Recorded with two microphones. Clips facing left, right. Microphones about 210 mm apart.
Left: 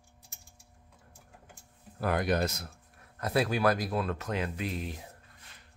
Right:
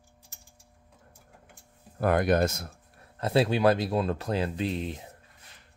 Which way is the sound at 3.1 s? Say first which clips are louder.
Right 4 dB; 25° right (ahead or behind).